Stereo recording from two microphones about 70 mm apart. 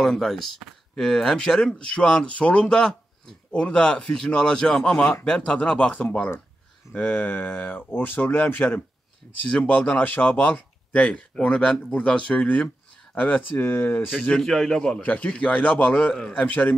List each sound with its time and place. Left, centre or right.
0.0 s speech: centre; by 14.0 s left
14.4 s speech: centre
16.3 s speech: left